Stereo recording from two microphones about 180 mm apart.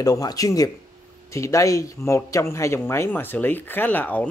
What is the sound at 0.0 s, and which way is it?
Speech, 20° left (ahead or behind).